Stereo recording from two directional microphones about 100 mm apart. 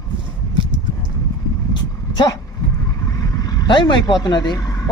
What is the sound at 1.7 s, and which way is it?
Vehicle, 45° left (ahead or behind).